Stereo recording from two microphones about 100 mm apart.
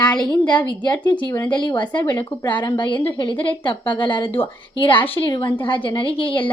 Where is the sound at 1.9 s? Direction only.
20° left (ahead or behind).